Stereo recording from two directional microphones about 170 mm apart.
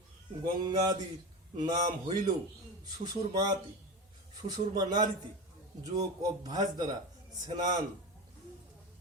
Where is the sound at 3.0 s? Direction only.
25° right (ahead or behind).